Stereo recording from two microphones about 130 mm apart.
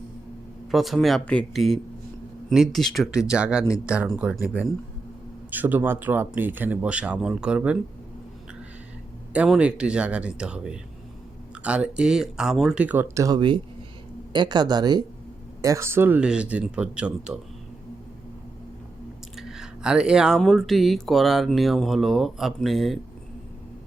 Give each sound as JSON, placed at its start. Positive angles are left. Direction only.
{"t": 0.7, "sound": "speech", "side_deg": 0}
{"t": 9.5, "sound": "speech", "side_deg": -10}
{"t": 13.1, "sound": "speech", "side_deg": -25}
{"t": 15.6, "sound": "speech", "side_deg": -20}
{"t": 19.4, "sound": "speech", "side_deg": -5}